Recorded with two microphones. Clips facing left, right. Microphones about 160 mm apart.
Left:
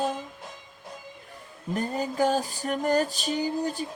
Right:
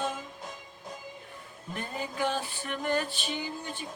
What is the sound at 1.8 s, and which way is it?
Music, 40° left (ahead or behind).